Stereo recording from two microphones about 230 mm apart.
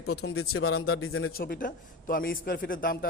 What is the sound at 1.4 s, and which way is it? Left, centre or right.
A man's voice, left.